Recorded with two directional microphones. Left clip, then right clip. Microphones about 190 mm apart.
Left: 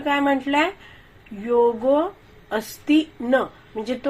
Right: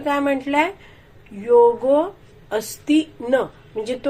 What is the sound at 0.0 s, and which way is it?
A woman's voice, 20° left (ahead or behind).